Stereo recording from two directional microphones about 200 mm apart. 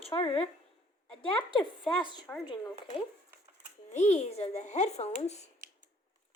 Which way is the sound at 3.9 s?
35° left (ahead or behind).